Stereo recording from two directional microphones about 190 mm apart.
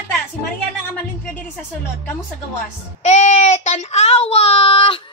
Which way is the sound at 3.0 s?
35° left (ahead or behind).